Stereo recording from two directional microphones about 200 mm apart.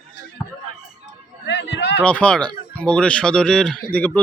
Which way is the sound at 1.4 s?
65° left (ahead or behind).